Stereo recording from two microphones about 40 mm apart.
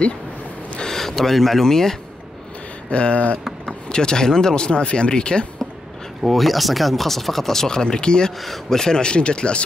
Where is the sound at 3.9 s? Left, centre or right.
Centre.